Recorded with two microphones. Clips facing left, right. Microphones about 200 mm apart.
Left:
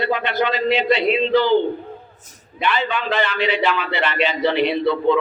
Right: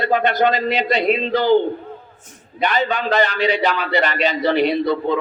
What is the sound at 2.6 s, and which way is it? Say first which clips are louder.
Speech: right 2 dB; 40° right (ahead or behind).